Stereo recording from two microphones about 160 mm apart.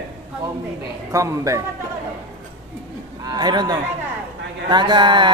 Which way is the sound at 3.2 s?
25° right (ahead or behind).